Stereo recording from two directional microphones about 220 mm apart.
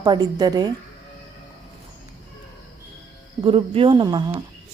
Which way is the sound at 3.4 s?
25° right (ahead or behind).